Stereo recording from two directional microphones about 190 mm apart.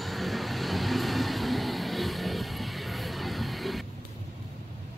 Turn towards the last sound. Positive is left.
turn(degrees=0)  # may be behind; listen again after turning